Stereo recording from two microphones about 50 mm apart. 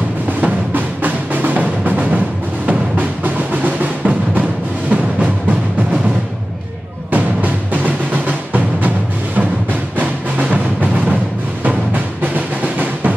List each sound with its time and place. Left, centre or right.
0.4 s music: right
7.1 s music: right
9.9 s music: right